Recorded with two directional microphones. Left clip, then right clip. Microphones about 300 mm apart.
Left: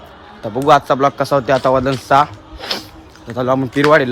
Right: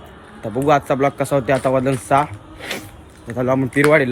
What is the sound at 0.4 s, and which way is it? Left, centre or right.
Speech, centre.